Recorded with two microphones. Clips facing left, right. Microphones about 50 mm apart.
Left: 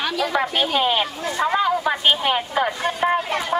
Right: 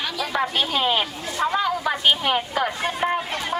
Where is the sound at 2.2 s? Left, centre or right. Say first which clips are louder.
Left 2 dB; centre.